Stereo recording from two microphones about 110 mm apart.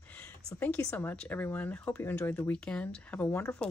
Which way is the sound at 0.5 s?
15° left (ahead or behind).